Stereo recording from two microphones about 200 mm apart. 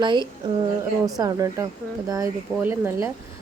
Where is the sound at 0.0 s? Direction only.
25° right (ahead or behind).